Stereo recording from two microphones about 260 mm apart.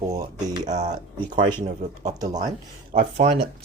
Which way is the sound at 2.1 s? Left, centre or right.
Centre.